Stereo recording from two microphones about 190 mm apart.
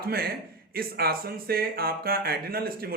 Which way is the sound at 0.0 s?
55° right (ahead or behind).